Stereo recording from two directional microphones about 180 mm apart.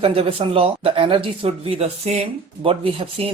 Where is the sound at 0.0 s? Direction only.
30° right (ahead or behind).